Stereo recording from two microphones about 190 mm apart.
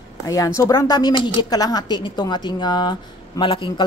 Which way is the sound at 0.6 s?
20° left (ahead or behind).